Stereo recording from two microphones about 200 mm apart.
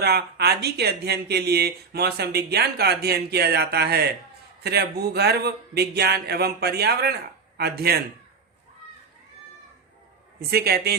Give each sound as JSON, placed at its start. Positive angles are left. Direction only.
{"t": 0.0, "sound": "speech", "side_deg": -55}
{"t": 10.5, "sound": "speech", "side_deg": -50}